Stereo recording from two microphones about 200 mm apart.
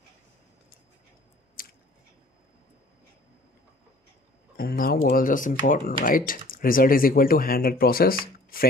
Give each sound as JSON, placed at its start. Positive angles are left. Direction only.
{"t": 1.6, "sound": "chewing", "side_deg": 45}
{"t": 4.6, "sound": "speech", "side_deg": 45}